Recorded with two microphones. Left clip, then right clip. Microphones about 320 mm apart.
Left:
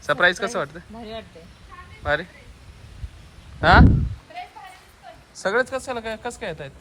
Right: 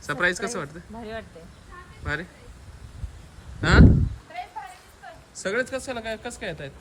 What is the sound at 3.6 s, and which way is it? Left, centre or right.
Speech, centre.